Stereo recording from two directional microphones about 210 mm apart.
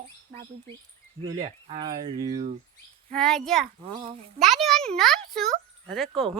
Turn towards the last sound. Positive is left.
turn(degrees=0)  # may be behind; listen again after turning